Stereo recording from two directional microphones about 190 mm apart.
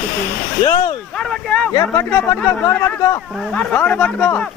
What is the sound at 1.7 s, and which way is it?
Speech, 20° left (ahead or behind).